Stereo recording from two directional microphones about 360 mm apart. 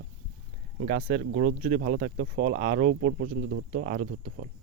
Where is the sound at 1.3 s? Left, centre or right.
Right.